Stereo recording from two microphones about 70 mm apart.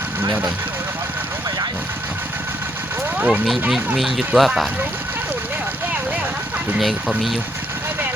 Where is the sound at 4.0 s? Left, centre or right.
Centre.